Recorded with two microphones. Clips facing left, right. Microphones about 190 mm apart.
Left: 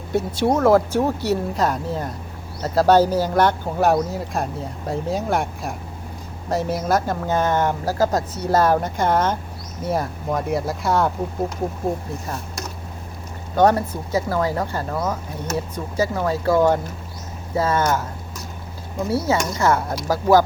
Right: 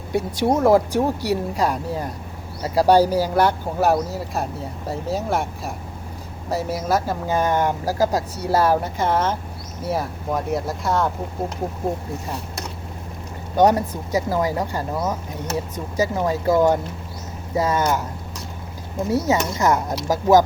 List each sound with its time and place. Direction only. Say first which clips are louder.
0.1 s speech: even; 15° right (ahead or behind)
13.6 s speech: even; 15° right (ahead or behind)
19.1 s speech: right 1 dB; 20° right (ahead or behind)